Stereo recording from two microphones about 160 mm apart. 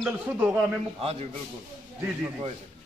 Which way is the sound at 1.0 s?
40° right (ahead or behind).